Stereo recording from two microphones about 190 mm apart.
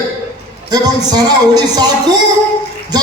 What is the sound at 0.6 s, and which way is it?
A man's voice, 20° right (ahead or behind).